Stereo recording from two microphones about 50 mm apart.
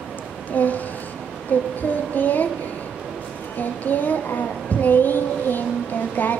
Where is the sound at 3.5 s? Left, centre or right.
Left.